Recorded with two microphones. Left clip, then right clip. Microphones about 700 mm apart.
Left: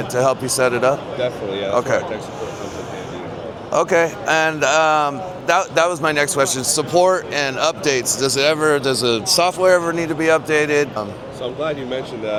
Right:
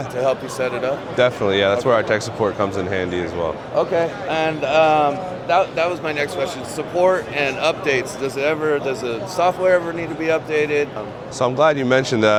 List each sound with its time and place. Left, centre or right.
0.2 s a man's voice: left
1.2 s speech: right
3.8 s speech: left
5.5 s speech: left
11.6 s speech: right